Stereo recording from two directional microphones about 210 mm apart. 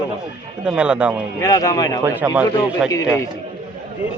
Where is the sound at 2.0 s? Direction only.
10° right (ahead or behind).